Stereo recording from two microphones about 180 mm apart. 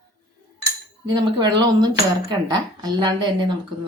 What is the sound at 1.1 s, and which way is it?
A woman's voice, 25° right (ahead or behind).